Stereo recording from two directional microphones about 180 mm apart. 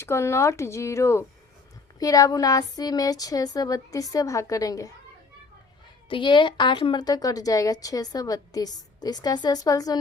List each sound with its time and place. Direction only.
0.0 s speech: 15° left (ahead or behind)
6.1 s speech: 25° left (ahead or behind)